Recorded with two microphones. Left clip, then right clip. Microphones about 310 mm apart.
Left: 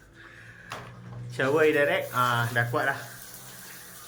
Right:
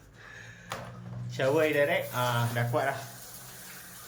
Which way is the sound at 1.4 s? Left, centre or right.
Centre.